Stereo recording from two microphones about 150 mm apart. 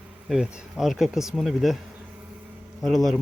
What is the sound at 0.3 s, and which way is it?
Speech, 5° right (ahead or behind).